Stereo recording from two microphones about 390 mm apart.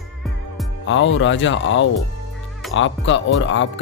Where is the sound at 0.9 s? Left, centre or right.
Left.